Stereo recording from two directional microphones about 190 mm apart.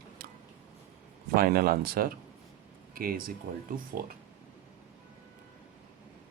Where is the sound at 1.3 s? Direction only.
50° right (ahead or behind).